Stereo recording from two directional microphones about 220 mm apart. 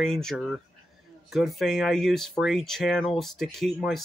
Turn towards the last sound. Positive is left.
turn(degrees=0)  # may be behind; listen again after turning